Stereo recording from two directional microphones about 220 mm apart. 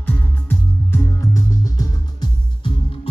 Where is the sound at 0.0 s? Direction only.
5° left (ahead or behind).